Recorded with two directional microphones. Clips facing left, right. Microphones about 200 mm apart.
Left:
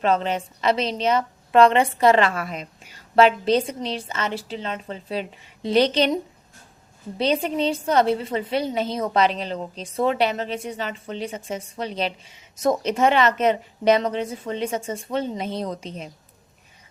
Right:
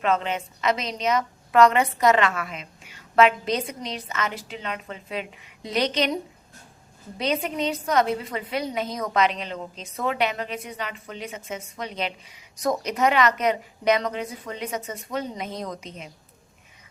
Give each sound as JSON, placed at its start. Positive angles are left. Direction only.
{"t": 0.0, "sound": "a woman's voice", "side_deg": 35}
{"t": 7.2, "sound": "a woman's voice", "side_deg": 30}